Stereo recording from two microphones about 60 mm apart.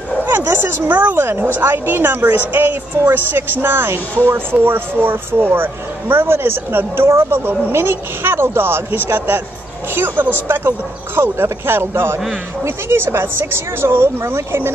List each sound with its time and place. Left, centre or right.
0.5 s speech: right